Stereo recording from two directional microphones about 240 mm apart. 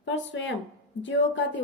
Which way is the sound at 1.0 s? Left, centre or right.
Left.